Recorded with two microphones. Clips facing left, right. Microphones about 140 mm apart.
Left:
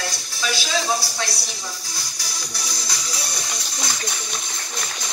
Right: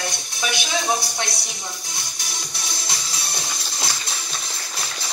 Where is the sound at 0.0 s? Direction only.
20° right (ahead or behind).